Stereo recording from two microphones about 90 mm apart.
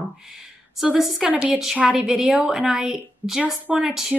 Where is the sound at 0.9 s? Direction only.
Centre (ahead or behind).